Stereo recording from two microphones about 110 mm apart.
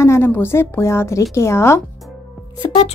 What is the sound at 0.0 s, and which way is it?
A woman's voice, 20° left (ahead or behind).